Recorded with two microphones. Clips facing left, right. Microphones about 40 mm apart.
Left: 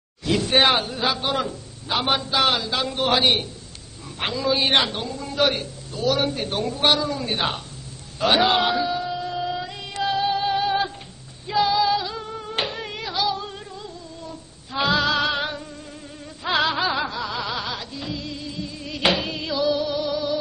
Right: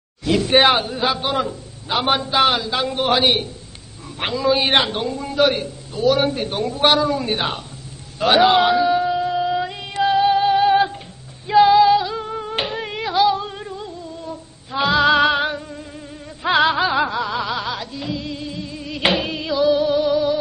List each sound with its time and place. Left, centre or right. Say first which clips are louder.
0.2 s a man's voice: right 4 dB; centre; by 5.3 s right
5.3 s a man's voice: right 4 dB; centre
8.9 s music: right 8 dB; centre
11.4 s female singing: right 8 dB; right
14.8 s music: right 4 dB; centre
15.0 s music: right 7 dB; right; by 18.2 s centre
18.2 s music: right 3 dB; centre